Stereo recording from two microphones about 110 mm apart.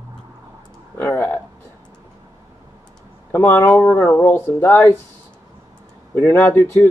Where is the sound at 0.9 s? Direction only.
20° left (ahead or behind).